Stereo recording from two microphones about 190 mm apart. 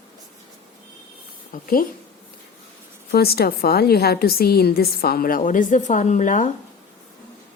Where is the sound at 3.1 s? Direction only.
55° left (ahead or behind).